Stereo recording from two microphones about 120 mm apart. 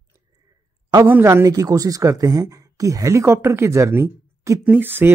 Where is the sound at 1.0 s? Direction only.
20° right (ahead or behind).